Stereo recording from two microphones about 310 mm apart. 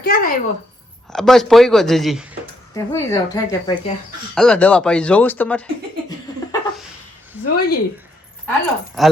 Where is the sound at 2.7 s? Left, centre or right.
Centre.